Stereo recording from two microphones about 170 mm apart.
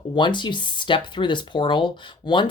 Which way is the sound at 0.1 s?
30° left (ahead or behind).